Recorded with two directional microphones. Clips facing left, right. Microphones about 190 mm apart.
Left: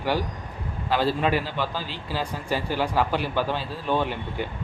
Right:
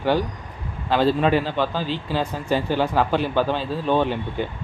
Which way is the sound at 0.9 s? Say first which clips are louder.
Right 4 dB; 25° right (ahead or behind).